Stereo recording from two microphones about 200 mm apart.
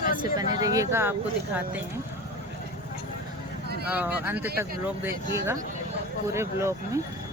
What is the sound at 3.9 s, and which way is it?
Speech, 10° right (ahead or behind).